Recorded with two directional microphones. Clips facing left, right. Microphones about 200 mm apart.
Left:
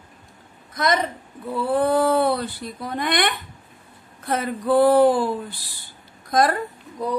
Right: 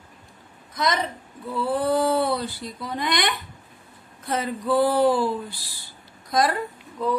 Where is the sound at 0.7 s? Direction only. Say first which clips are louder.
Left 3 dB; 50° left (ahead or behind).